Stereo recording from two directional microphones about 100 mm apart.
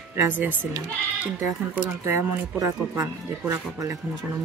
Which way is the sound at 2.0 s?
25° right (ahead or behind).